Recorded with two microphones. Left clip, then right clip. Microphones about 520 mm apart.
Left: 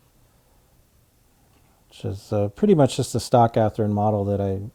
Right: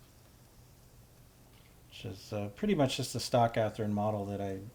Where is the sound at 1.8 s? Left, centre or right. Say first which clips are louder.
Left 13 dB; left.